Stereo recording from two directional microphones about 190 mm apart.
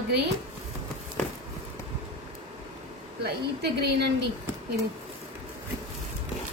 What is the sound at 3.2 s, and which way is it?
Speech, 60° right (ahead or behind).